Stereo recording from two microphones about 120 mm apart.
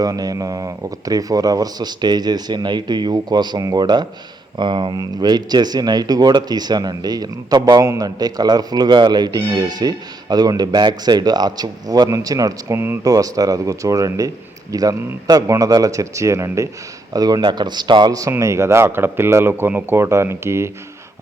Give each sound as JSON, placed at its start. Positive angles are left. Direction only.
{"t": 0.0, "sound": "speech", "side_deg": -30}